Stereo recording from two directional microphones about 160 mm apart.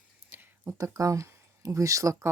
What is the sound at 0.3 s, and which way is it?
Speech, 15° right (ahead or behind).